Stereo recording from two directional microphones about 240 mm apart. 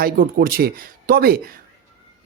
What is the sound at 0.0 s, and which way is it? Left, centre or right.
Speech, right.